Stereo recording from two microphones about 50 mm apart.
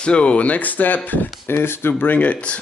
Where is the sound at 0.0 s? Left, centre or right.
Left.